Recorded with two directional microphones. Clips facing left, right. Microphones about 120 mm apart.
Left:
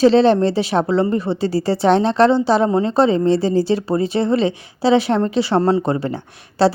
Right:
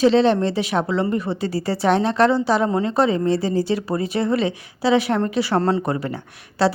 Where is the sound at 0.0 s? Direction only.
35° left (ahead or behind).